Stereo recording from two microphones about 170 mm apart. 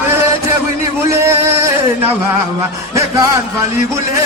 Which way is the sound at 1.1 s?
15° right (ahead or behind).